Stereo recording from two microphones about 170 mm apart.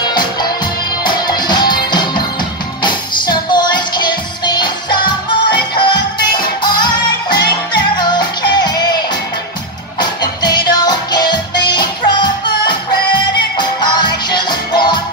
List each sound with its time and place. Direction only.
0.0 s music: 25° left (ahead or behind)